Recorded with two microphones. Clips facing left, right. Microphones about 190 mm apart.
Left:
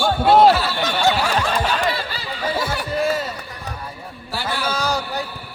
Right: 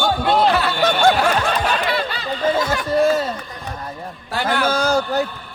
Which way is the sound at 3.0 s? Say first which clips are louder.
Right 3 dB; 40° right (ahead or behind).